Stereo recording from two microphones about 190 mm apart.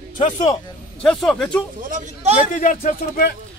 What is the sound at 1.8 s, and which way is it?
Speech, 45° right (ahead or behind).